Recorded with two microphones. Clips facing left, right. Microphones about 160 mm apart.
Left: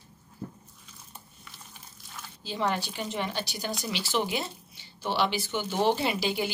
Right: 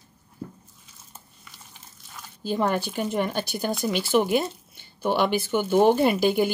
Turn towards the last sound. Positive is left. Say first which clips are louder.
# right 8 dB
turn(degrees=-50)  # may be behind; listen again after turning